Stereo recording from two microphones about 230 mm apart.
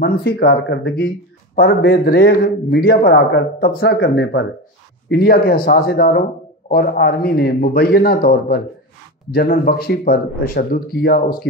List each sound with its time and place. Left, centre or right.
0.0 s a man's voice: left